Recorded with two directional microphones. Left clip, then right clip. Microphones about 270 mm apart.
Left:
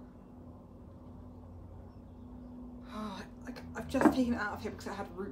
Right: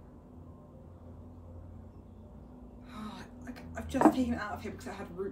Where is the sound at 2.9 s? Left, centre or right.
Centre.